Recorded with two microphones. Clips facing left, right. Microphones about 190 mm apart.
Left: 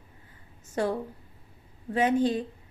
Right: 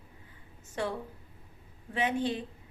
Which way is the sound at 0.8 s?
40° left (ahead or behind).